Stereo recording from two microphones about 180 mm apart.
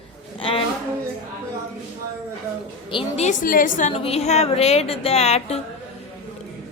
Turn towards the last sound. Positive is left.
turn(degrees=35)  # may be behind; listen again after turning